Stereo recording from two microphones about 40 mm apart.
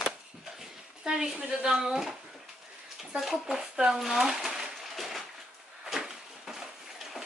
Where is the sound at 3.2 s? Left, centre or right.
Centre.